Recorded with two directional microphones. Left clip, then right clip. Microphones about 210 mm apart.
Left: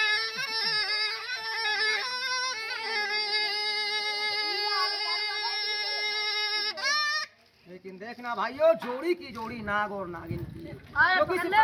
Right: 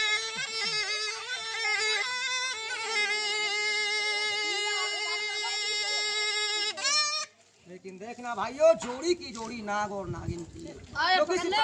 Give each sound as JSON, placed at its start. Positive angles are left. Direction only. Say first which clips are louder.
{"t": 0.0, "sound": "music", "louder": "left 2 dB", "side_deg": 0}
{"t": 4.9, "sound": "a sound", "louder": "left 1 dB", "side_deg": 5}
{"t": 8.2, "sound": "speech", "louder": "right 1 dB", "side_deg": 0}
{"t": 10.9, "sound": "a man's voice", "louder": "left 3 dB", "side_deg": -35}